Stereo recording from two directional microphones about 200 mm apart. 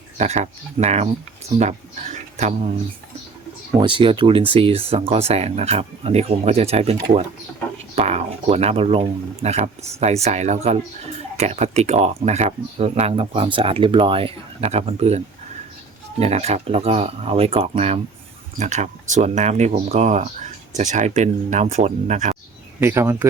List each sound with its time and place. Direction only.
0.2 s speech: 35° right (ahead or behind)
3.8 s speech: 25° right (ahead or behind)
16.2 s speech: 35° right (ahead or behind)
22.8 s speech: 10° right (ahead or behind)